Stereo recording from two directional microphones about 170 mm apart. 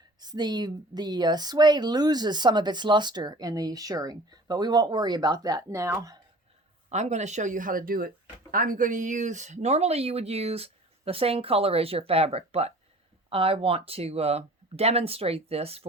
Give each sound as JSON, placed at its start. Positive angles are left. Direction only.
{"t": 0.2, "sound": "speech", "side_deg": -25}
{"t": 6.9, "sound": "speech", "side_deg": -40}